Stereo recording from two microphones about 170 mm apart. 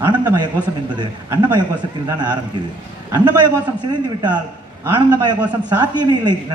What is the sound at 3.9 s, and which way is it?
A man's voice, 25° right (ahead or behind).